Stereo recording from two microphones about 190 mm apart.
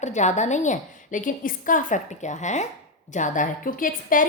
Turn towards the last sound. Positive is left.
turn(degrees=45)  # may be behind; listen again after turning